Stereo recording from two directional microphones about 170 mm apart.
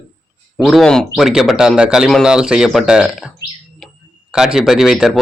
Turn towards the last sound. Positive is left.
turn(degrees=-5)  # may be behind; listen again after turning